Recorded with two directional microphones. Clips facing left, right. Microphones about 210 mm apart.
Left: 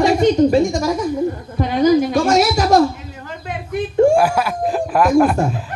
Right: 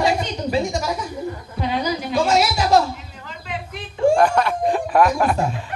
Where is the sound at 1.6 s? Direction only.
45° left (ahead or behind).